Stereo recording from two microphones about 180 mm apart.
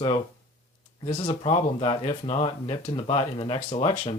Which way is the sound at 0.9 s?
25° left (ahead or behind).